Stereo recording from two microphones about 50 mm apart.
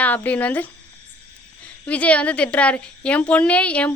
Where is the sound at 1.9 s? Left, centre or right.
Left.